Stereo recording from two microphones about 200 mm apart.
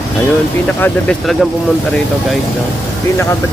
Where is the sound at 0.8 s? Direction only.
5° left (ahead or behind).